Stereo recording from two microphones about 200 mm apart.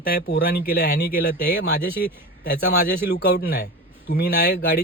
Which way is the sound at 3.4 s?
50° left (ahead or behind).